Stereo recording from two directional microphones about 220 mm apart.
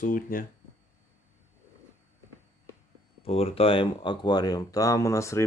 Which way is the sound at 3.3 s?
25° left (ahead or behind).